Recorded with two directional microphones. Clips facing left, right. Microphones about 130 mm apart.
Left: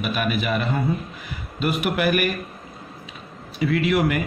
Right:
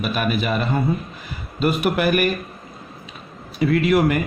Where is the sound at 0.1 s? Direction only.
35° right (ahead or behind).